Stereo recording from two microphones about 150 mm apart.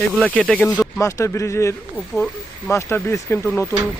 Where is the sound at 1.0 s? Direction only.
20° left (ahead or behind).